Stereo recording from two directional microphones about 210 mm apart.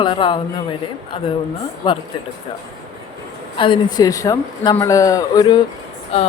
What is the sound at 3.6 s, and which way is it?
A man's voice, 25° left (ahead or behind).